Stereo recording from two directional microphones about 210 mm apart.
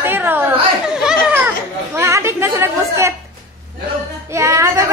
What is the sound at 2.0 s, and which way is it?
Chatter, 15° right (ahead or behind).